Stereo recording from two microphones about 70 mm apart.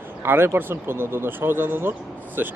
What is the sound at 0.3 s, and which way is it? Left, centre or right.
Speech, right.